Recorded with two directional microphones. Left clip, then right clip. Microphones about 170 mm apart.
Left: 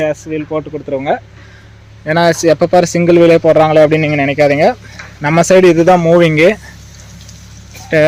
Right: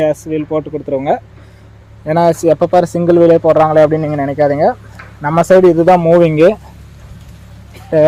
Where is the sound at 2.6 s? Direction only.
20° left (ahead or behind).